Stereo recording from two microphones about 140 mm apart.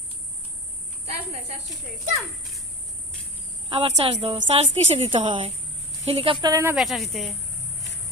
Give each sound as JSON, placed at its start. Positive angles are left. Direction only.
{"t": 3.7, "sound": "a woman's voice", "side_deg": -45}
{"t": 5.2, "sound": "speech", "side_deg": -35}
{"t": 6.5, "sound": "speech", "side_deg": -20}
{"t": 6.7, "sound": "speech", "side_deg": 0}